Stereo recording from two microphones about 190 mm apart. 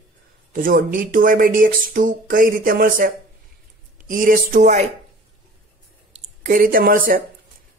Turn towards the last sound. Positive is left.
turn(degrees=-45)  # may be behind; listen again after turning